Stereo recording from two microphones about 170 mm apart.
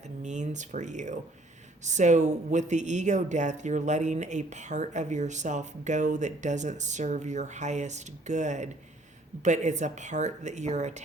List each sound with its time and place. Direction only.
0.2 s speech: 45° right (ahead or behind)